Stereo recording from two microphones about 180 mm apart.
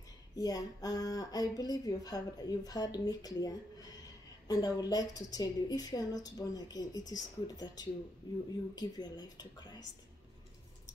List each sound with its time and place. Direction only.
0.4 s a woman's voice: 20° left (ahead or behind)